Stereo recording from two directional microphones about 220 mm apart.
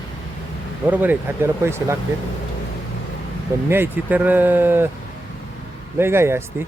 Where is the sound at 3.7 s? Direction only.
10° right (ahead or behind).